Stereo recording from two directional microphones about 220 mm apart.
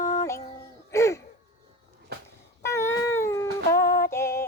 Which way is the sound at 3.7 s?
40° left (ahead or behind).